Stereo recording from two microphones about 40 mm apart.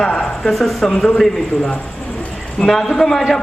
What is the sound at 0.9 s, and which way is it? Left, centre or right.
Speech, centre.